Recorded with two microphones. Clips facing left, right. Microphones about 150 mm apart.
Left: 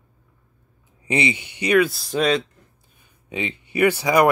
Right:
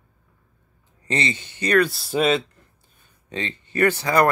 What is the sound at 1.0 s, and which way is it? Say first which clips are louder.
Speech: left 3 dB; 15° left (ahead or behind).